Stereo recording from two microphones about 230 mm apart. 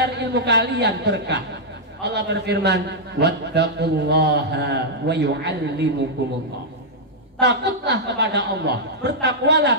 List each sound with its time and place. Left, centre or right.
0.0 s a man's voice: right
7.3 s a man's voice: right